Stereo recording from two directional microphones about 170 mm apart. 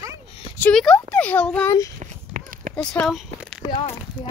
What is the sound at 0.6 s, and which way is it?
Speech, 5° left (ahead or behind).